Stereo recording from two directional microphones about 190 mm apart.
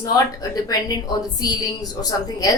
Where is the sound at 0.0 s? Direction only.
20° left (ahead or behind).